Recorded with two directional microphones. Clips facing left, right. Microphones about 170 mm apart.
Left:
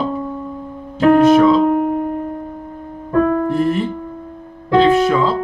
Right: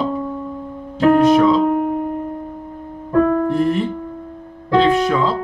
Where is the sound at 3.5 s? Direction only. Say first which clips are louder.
Even; centre (ahead or behind).